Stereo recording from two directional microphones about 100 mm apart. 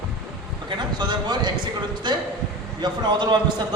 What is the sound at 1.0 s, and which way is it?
A man's voice, 50° right (ahead or behind).